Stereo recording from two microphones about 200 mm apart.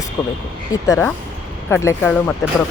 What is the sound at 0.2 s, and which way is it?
Speech, 10° left (ahead or behind).